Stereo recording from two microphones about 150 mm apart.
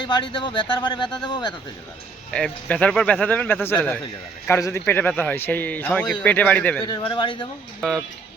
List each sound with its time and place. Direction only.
0.0 s speech: 30° left (ahead or behind)
2.3 s a man's voice: 5° left (ahead or behind)
6.8 s speech: 30° left (ahead or behind)
7.8 s speech: centre (ahead or behind)